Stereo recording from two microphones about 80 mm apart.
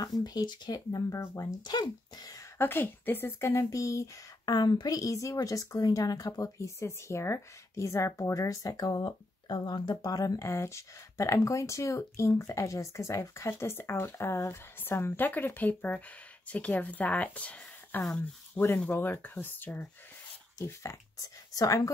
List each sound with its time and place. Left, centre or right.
0.0 s a woman's voice: left
1.6 s speech: left
2.6 s speech: left
4.6 s speech: left
4.9 s a woman's voice: left
10.5 s speech: left; by 18.7 s centre
18.9 s speech: left
20.6 s speech: left